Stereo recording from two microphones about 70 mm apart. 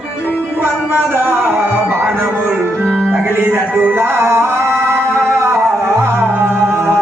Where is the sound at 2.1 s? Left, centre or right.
Right.